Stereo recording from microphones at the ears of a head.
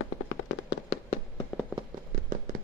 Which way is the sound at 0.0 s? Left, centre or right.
Left.